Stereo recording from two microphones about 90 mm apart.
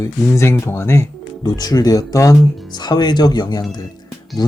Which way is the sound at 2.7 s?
50° left (ahead or behind).